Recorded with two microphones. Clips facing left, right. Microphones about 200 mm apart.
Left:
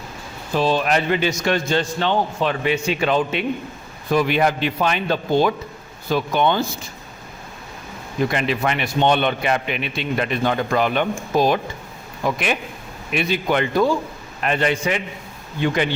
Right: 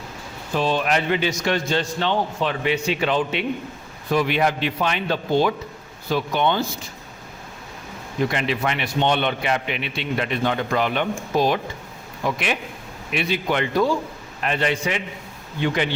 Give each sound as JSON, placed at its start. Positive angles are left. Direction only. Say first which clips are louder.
{"t": 0.5, "sound": "a man's voice", "louder": "left 2 dB", "side_deg": 35}
{"t": 8.3, "sound": "a man's voice", "louder": "left 2 dB", "side_deg": 45}